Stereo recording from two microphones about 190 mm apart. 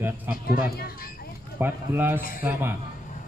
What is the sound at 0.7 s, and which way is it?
Speech, 50° left (ahead or behind).